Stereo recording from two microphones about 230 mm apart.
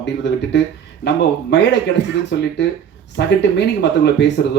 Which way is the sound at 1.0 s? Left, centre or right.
Left.